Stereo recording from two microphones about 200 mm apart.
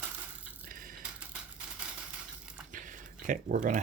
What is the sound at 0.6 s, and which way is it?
Coin, 45° right (ahead or behind).